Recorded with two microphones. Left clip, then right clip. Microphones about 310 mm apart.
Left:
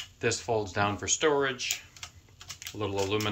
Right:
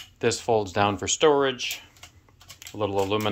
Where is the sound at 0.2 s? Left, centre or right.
Right.